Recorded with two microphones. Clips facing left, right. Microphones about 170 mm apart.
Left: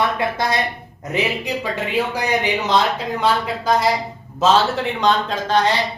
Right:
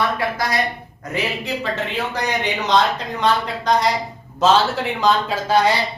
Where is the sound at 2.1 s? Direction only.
10° left (ahead or behind).